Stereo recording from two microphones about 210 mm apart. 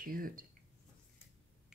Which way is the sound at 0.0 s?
40° right (ahead or behind).